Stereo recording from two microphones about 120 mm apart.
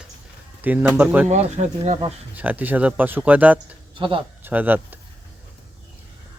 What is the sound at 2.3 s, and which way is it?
Speech, 15° right (ahead or behind).